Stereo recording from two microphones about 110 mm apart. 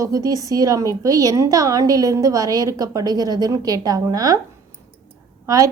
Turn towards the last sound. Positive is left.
turn(degrees=-30)  # may be behind; listen again after turning